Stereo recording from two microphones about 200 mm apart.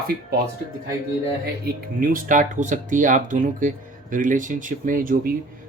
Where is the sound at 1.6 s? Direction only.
45° right (ahead or behind).